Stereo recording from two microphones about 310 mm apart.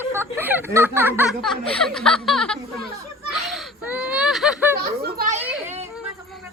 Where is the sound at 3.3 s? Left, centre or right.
Centre.